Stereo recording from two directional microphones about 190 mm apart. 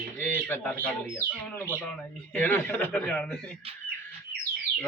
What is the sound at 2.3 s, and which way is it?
A man's voice, 10° left (ahead or behind).